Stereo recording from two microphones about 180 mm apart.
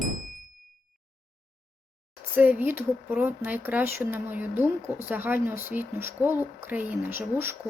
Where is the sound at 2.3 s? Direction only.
10° right (ahead or behind).